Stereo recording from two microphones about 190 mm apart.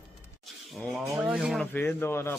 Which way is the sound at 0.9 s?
5° right (ahead or behind).